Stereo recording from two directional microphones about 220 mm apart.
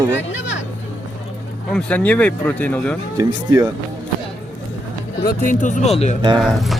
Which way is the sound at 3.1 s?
15° right (ahead or behind).